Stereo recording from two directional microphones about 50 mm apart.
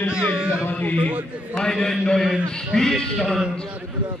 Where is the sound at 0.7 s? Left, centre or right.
Left.